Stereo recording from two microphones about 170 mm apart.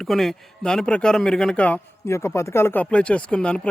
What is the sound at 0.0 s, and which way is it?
A man's voice, centre (ahead or behind).